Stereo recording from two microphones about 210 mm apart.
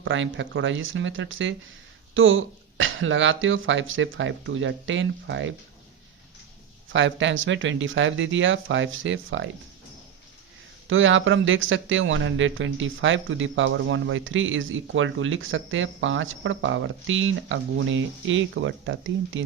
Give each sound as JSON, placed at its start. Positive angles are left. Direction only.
{"t": 0.0, "sound": "speech", "side_deg": -65}
{"t": 6.9, "sound": "speech", "side_deg": -60}
{"t": 10.8, "sound": "speech", "side_deg": -65}